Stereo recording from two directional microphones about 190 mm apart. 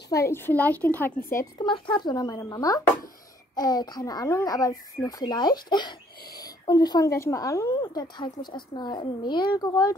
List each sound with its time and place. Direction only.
0.1 s a woman's voice: 15° left (ahead or behind)